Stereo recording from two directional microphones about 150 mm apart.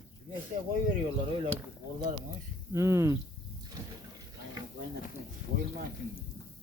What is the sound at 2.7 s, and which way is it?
Speech, 20° right (ahead or behind).